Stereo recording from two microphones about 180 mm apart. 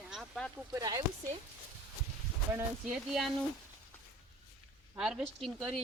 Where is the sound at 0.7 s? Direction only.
20° right (ahead or behind).